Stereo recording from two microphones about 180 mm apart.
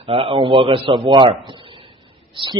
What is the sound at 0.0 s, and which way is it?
A man's voice, 30° right (ahead or behind).